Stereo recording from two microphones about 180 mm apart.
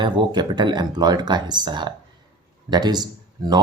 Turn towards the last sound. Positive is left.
turn(degrees=-20)  # may be behind; listen again after turning